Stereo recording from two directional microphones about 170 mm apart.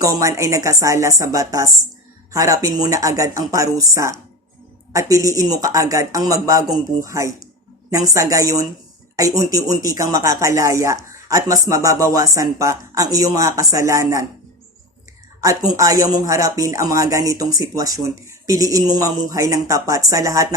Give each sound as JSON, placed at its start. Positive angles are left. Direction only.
{"t": 0.0, "sound": "speech", "side_deg": -20}
{"t": 15.4, "sound": "speech", "side_deg": -20}